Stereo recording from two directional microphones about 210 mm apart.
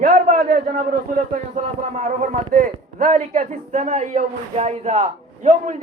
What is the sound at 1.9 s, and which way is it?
A man's voice, 35° right (ahead or behind).